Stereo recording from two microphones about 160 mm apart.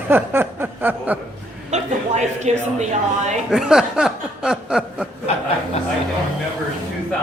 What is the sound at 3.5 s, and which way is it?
Chuckle, 5° right (ahead or behind).